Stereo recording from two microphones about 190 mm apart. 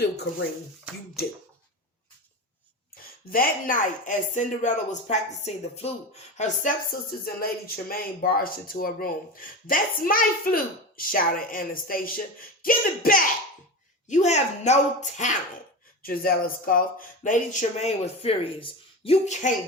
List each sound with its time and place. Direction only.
0.0 s speech: 60° left (ahead or behind)
2.9 s speech: 50° left (ahead or behind)
14.1 s speech: 35° left (ahead or behind)
16.0 s speech: 50° left (ahead or behind)